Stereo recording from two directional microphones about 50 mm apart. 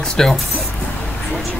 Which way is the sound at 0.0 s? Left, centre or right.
Centre.